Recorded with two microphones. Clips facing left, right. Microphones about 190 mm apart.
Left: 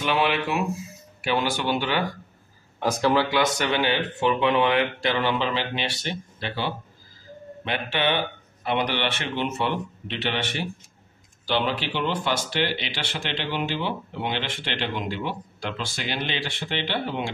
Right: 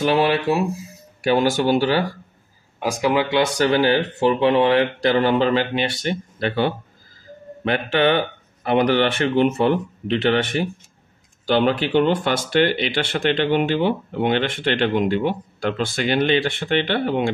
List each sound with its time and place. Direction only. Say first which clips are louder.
0.0 s speech: right 6 dB; 40° right (ahead or behind)
2.8 s speech: right 2 dB; 10° right (ahead or behind)
3.3 s speech: right 5 dB; 30° right (ahead or behind); by 17.3 s 55° right (ahead or behind)